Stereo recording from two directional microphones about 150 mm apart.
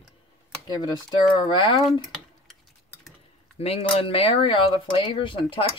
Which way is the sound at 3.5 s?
40° left (ahead or behind).